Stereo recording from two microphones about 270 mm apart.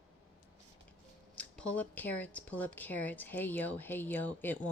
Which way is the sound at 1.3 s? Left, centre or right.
Centre.